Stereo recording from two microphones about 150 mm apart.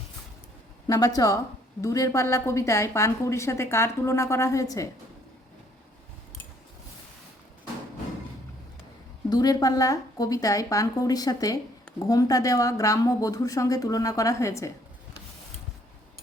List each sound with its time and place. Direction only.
0.9 s a woman's voice: 25° left (ahead or behind)
9.3 s a woman's voice: 25° left (ahead or behind)